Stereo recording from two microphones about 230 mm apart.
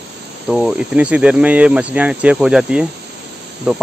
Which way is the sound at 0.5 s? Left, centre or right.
Centre.